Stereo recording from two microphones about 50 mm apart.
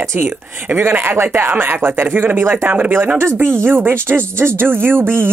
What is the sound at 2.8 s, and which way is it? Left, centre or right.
Speech, right.